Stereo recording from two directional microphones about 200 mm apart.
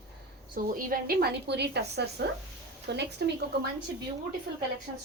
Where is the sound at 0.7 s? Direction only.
45° right (ahead or behind).